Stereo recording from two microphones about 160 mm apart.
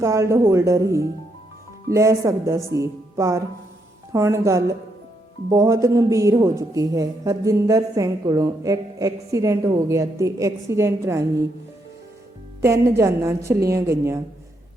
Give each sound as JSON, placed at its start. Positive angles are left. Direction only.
{"t": 0.0, "sound": "a woman's voice", "side_deg": -20}
{"t": 12.6, "sound": "a woman's voice", "side_deg": -15}